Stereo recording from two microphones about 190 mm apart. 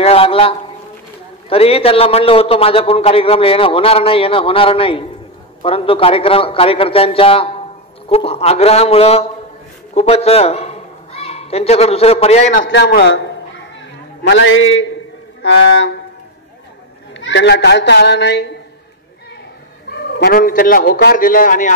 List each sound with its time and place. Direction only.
0.0 s a sound: 30° left (ahead or behind)
1.5 s a man's voice: 30° left (ahead or behind)
12.7 s a child's voice: 65° left (ahead or behind)
14.2 s a man's voice: 75° left (ahead or behind)
15.4 s speech: 65° left (ahead or behind)
17.2 s a child's voice: 65° left (ahead or behind)
19.9 s speech: 60° left (ahead or behind)